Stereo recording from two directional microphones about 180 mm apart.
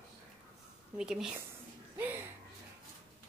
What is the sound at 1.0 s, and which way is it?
Speech, 5° right (ahead or behind).